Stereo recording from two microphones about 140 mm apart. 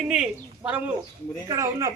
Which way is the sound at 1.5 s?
20° right (ahead or behind).